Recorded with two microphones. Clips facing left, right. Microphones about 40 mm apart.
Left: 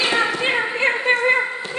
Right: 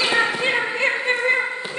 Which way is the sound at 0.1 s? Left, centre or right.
Centre.